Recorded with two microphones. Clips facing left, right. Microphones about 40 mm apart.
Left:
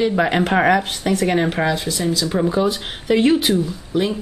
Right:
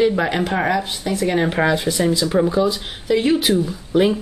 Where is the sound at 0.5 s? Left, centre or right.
Left.